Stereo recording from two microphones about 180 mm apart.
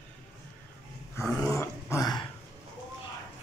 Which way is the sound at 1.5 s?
15° left (ahead or behind).